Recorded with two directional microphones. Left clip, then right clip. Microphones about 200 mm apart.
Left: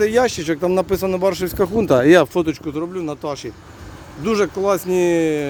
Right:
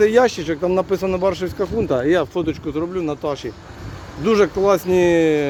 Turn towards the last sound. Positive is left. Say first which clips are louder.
# right 2 dB
turn(degrees=5)  # may be behind; listen again after turning